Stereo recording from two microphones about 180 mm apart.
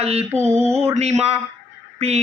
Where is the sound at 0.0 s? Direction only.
35° right (ahead or behind).